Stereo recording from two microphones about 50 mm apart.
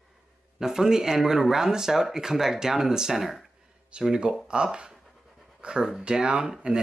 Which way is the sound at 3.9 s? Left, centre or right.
Centre.